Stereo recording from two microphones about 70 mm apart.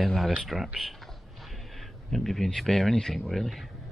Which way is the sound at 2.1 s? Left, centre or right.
Centre.